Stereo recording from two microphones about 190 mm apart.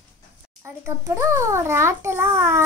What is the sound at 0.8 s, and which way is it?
A child's voice, 15° right (ahead or behind).